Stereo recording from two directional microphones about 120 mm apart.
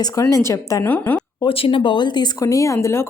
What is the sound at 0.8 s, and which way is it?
Speech, 15° left (ahead or behind).